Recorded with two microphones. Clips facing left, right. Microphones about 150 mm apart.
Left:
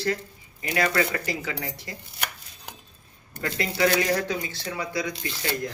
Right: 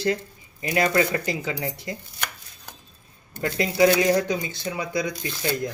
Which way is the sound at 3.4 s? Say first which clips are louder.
Right 5 dB; 20° right (ahead or behind).